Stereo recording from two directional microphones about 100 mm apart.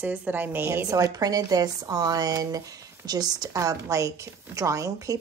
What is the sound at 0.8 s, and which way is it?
Speech, 35° right (ahead or behind).